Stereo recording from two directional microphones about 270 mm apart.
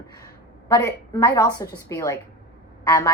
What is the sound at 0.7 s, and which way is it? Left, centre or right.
A woman's voice, centre.